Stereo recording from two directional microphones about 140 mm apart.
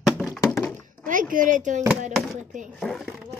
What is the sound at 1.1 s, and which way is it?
Speech, 70° right (ahead or behind).